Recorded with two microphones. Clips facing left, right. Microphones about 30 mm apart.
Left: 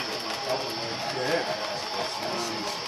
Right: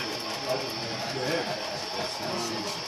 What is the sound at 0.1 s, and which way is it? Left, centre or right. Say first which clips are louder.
Music: left 1 dB; left.